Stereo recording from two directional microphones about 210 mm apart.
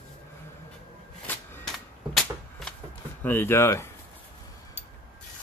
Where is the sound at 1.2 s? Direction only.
10° left (ahead or behind).